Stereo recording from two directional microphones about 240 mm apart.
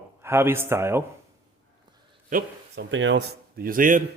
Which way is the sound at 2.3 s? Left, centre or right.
Right.